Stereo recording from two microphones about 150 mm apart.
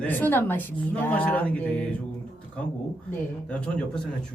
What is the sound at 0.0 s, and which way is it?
A woman's voice, 15° left (ahead or behind).